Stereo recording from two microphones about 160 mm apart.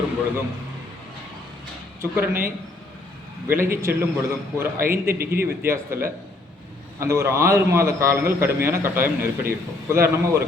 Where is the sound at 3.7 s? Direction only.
15° right (ahead or behind).